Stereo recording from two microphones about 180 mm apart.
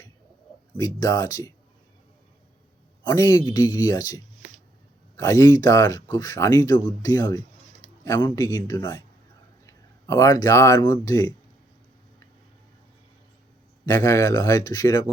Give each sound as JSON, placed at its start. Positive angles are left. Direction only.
{"t": 0.8, "sound": "speech", "side_deg": 20}
{"t": 3.0, "sound": "speech", "side_deg": 20}
{"t": 13.8, "sound": "speech", "side_deg": 15}